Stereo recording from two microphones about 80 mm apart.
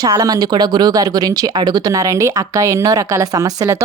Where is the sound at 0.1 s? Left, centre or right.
Right.